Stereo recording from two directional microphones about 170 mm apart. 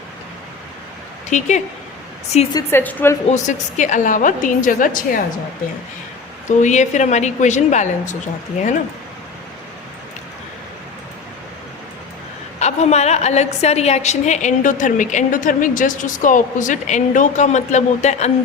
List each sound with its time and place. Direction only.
1.3 s a woman's voice: 45° left (ahead or behind)
2.5 s a woman's voice: 20° left (ahead or behind)
3.2 s a woman's voice: 45° left (ahead or behind)
6.6 s a woman's voice: 45° left (ahead or behind)
12.5 s a woman's voice: 40° left (ahead or behind)